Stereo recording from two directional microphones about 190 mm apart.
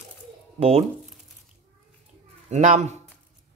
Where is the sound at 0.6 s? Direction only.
35° right (ahead or behind).